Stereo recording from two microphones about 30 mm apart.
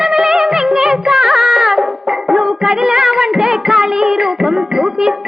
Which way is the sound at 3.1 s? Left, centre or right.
Centre.